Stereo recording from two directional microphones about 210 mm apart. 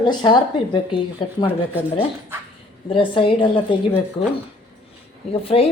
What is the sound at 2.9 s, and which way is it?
Speech, 25° left (ahead or behind).